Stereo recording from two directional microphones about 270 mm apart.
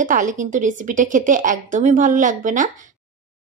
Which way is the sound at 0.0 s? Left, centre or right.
Right.